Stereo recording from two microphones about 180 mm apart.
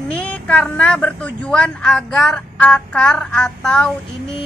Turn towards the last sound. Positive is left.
turn(degrees=5)  # may be behind; listen again after turning